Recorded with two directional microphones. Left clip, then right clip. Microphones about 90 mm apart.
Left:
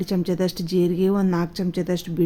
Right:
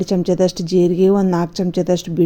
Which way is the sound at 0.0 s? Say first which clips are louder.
Right 8 dB; 40° right (ahead or behind).